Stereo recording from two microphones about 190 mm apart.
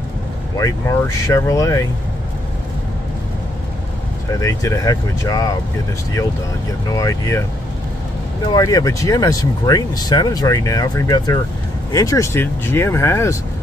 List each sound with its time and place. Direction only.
0.6 s speech: 15° left (ahead or behind)
4.3 s speech: 15° left (ahead or behind)
7.0 s speech: 15° left (ahead or behind)
8.5 s speech: 20° left (ahead or behind)